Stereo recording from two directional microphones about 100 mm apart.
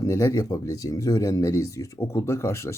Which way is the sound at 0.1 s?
30° left (ahead or behind).